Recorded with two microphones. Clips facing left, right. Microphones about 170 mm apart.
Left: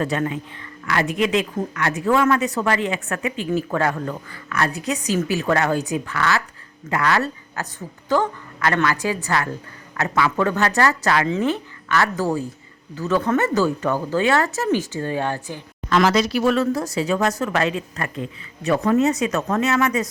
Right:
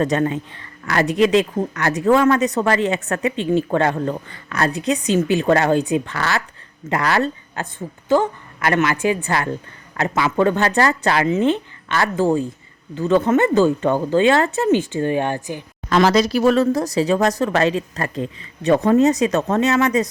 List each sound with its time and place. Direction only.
0.0 s a woman's voice: 35° right (ahead or behind); by 15.6 s 15° right (ahead or behind)
15.9 s speech: 35° right (ahead or behind)